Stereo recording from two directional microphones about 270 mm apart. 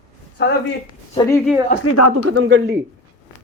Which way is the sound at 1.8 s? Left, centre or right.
Left.